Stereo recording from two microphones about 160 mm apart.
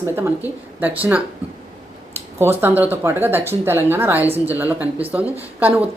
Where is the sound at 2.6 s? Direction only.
15° right (ahead or behind).